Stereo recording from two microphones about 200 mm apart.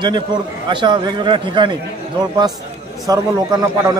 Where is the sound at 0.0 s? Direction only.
20° right (ahead or behind).